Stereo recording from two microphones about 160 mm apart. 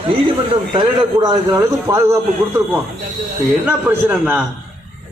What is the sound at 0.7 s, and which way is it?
A man's voice, 30° right (ahead or behind).